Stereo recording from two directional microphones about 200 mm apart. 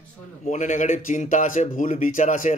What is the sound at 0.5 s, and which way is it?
Speech, 35° left (ahead or behind).